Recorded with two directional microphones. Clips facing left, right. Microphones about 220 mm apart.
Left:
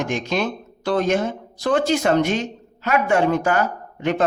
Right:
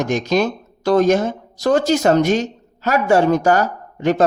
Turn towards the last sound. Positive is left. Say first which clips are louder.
# right 4 dB
turn(degrees=-40)  # may be behind; listen again after turning